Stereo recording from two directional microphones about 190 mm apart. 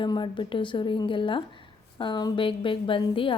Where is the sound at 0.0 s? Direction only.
25° left (ahead or behind).